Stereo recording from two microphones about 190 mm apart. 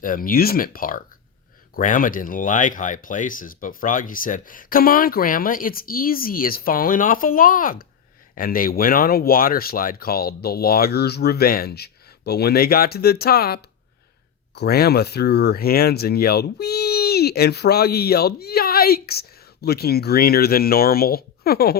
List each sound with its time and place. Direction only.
0.0 s speech: 45° left (ahead or behind)